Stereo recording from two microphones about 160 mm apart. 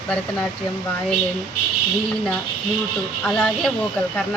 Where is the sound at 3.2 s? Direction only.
5° left (ahead or behind).